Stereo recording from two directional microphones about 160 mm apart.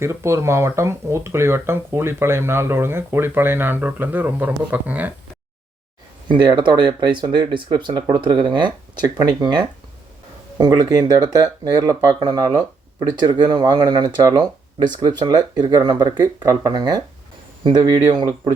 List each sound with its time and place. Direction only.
0.0 s speech: 15° right (ahead or behind)
6.2 s speech: 30° right (ahead or behind)